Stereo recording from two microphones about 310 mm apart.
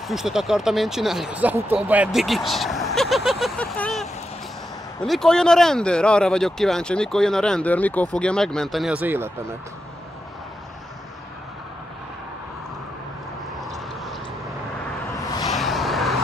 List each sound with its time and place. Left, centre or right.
0.1 s speech: centre
13.6 s vehicle: centre
15.4 s vehicle: centre